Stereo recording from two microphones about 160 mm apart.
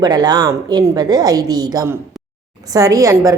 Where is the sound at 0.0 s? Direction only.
25° right (ahead or behind).